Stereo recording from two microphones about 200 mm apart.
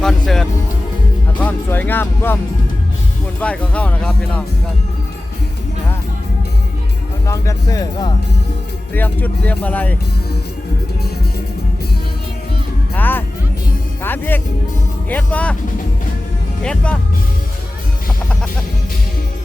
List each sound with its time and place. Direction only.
0.0 s speech: centre (ahead or behind)
3.4 s speech: 5° left (ahead or behind)
7.3 s speech: 15° left (ahead or behind)
12.9 s music: 10° left (ahead or behind)
14.0 s speech: 10° left (ahead or behind)
16.6 s speech: 5° left (ahead or behind)